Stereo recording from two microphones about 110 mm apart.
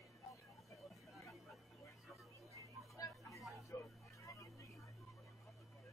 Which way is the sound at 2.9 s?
35° left (ahead or behind).